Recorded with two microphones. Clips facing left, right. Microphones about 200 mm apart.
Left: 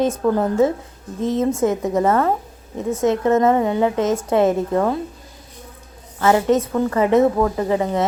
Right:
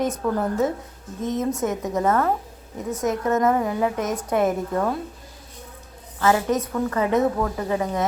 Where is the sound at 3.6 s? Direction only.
75° left (ahead or behind).